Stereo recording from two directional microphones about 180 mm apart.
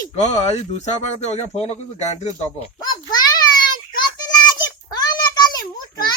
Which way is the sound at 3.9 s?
20° left (ahead or behind).